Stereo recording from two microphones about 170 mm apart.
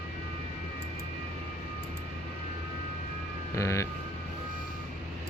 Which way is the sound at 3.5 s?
20° left (ahead or behind).